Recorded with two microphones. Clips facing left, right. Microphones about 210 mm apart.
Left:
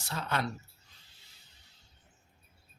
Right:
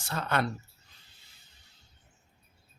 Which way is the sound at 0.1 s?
55° right (ahead or behind).